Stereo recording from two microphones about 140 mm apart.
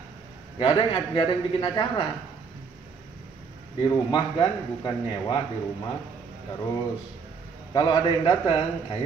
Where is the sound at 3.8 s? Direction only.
25° left (ahead or behind).